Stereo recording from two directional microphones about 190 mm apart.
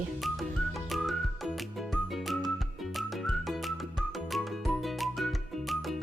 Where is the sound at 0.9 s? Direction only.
Centre (ahead or behind).